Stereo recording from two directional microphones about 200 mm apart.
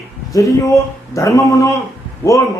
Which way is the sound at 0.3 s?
15° left (ahead or behind).